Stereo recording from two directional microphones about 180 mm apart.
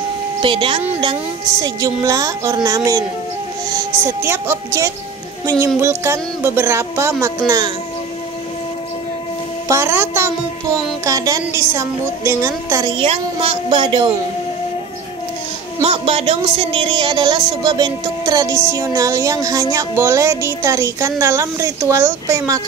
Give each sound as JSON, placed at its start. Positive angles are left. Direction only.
{"t": 0.4, "sound": "a woman's voice", "side_deg": -30}
{"t": 9.7, "sound": "speech", "side_deg": -15}
{"t": 12.9, "sound": "a woman's voice", "side_deg": -30}
{"t": 15.8, "sound": "a woman's voice", "side_deg": -30}